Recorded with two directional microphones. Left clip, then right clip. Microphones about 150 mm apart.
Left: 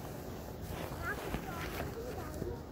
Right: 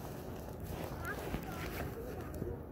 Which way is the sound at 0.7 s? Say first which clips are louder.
Left 3 dB; 30° right (ahead or behind).